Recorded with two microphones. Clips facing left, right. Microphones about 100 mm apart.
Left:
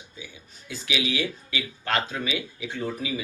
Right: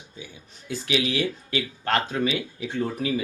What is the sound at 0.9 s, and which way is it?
Speech, 45° right (ahead or behind).